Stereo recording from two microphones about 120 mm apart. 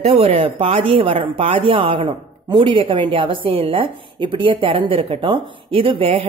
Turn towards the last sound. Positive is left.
turn(degrees=-50)  # may be behind; listen again after turning